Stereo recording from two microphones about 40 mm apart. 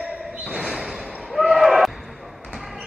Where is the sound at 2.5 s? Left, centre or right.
Centre.